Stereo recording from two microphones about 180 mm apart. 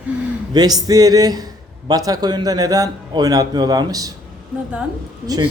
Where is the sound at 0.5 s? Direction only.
20° right (ahead or behind).